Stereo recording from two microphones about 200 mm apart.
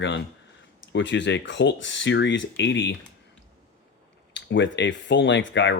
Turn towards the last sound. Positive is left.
turn(degrees=65)  # may be behind; listen again after turning